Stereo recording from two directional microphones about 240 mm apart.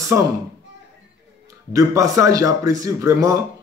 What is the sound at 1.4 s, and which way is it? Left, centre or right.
A man's voice, centre.